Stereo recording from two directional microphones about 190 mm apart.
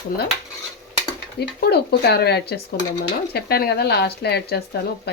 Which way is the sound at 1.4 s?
60° left (ahead or behind).